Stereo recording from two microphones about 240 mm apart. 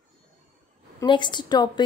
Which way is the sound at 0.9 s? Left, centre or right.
Centre.